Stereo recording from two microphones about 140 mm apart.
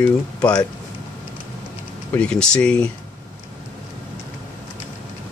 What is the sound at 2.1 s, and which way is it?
Speech, 5° left (ahead or behind).